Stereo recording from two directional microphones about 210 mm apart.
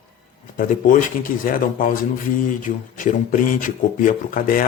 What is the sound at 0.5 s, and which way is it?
A man's voice, 40° left (ahead or behind).